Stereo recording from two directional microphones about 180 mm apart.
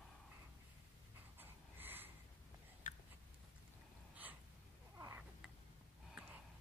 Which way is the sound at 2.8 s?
45° left (ahead or behind).